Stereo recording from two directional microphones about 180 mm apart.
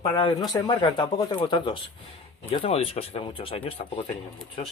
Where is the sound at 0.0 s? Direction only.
30° left (ahead or behind).